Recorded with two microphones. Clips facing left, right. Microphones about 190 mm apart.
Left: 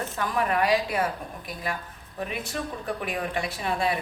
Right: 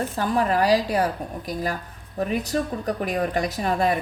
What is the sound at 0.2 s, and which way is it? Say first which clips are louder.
Speech: right 4 dB; 35° right (ahead or behind).